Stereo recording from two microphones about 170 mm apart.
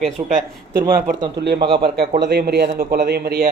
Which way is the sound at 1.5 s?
25° right (ahead or behind).